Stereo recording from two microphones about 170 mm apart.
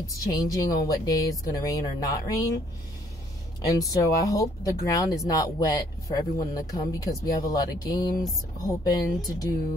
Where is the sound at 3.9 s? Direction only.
20° left (ahead or behind).